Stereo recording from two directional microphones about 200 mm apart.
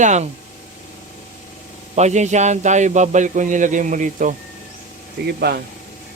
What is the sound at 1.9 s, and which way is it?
A man's voice, 35° right (ahead or behind).